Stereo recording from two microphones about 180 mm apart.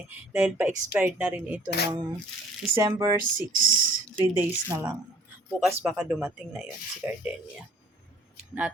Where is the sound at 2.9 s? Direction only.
25° right (ahead or behind).